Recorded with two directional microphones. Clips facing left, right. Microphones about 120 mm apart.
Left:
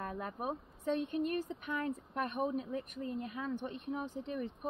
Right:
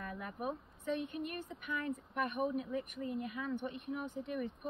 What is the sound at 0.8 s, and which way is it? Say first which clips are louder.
A woman's voice: left 4 dB; 30° left (ahead or behind).